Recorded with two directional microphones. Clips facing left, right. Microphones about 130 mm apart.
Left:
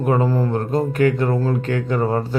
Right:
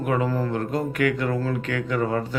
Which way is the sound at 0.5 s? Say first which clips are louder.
Left 5 dB; 30° left (ahead or behind).